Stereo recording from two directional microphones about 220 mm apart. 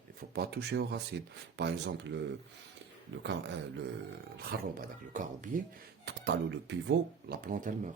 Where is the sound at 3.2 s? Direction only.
50° right (ahead or behind).